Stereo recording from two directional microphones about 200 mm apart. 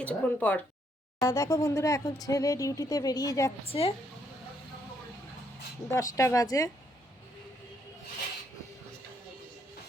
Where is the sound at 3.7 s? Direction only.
30° left (ahead or behind).